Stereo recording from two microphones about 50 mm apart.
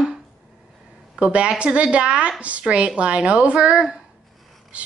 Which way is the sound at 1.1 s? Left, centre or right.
Right.